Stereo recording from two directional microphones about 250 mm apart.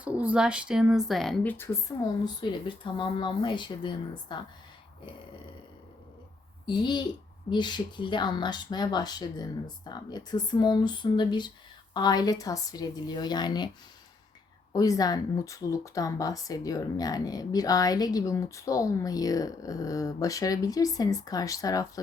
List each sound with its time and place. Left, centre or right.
0.0 s speech: centre
6.7 s speech: centre
14.7 s speech: centre